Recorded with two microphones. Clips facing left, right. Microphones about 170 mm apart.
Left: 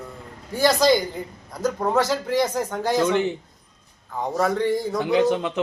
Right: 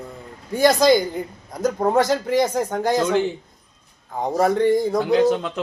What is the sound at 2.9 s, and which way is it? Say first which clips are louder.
Speech: even; 5° left (ahead or behind).